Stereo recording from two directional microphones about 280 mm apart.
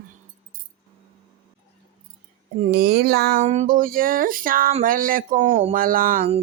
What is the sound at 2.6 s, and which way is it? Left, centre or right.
Speech, right.